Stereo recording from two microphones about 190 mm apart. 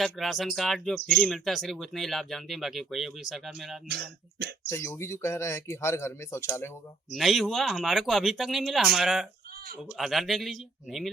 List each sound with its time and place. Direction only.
0.0 s speech: centre (ahead or behind)
3.8 s speech: 60° right (ahead or behind)
4.6 s speech: 15° left (ahead or behind)
7.1 s speech: centre (ahead or behind)